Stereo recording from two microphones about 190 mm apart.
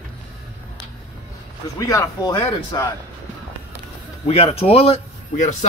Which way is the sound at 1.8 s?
20° left (ahead or behind).